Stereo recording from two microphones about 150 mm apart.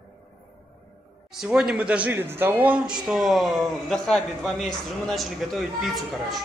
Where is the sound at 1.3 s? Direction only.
5° right (ahead or behind).